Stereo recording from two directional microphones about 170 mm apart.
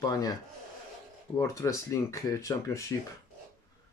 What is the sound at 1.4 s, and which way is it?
Speech, 20° left (ahead or behind).